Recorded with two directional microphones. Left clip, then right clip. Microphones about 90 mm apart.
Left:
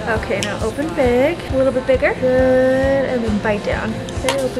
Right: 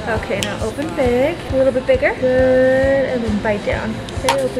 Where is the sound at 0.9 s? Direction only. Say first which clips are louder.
Left 1 dB; 20° left (ahead or behind).